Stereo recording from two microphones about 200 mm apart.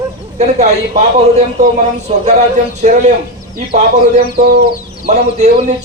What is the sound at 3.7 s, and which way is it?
Speech, 35° right (ahead or behind).